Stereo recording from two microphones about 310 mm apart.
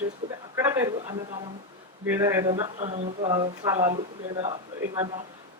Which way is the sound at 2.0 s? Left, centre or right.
Centre.